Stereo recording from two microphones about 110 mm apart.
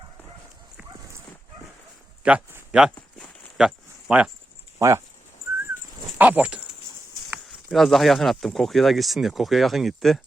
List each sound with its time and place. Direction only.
2.2 s speech: 10° right (ahead or behind)
3.2 s clip-clop: centre (ahead or behind)
4.1 s speech: 10° right (ahead or behind)
4.8 s speech: 30° right (ahead or behind)
6.1 s speech: 15° right (ahead or behind)
7.7 s speech: centre (ahead or behind)